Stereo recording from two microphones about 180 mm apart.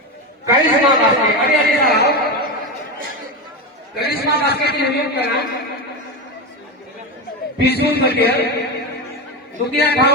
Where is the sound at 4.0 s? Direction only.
60° left (ahead or behind).